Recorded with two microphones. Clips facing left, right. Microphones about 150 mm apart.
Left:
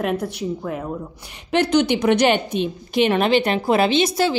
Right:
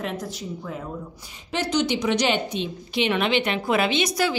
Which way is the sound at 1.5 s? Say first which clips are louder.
Left 6 dB; 60° left (ahead or behind).